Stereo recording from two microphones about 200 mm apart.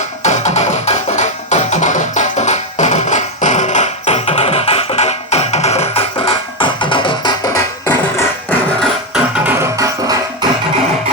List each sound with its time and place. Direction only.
0.2 s music: 35° left (ahead or behind); by 8.5 s 10° left (ahead or behind)
8.8 s music: 5° right (ahead or behind)